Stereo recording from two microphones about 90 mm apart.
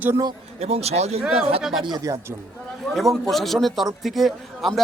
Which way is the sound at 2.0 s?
35° right (ahead or behind).